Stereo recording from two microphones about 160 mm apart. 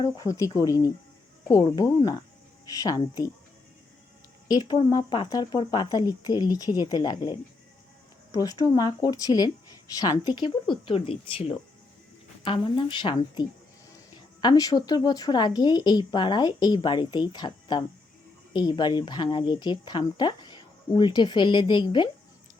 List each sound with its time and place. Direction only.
0.0 s speech: 20° left (ahead or behind)
4.4 s speech: 25° left (ahead or behind)